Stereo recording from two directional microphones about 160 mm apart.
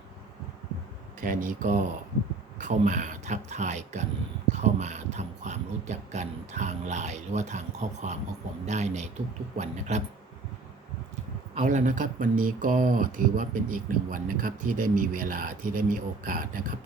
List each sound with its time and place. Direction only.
1.2 s speech: 55° right (ahead or behind)
11.6 s speech: 55° right (ahead or behind)